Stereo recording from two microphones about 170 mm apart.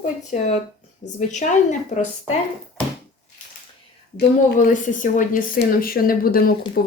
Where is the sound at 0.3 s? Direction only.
50° left (ahead or behind).